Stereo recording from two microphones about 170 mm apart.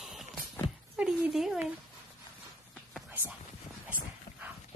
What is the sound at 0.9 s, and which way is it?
Speech, 5° right (ahead or behind).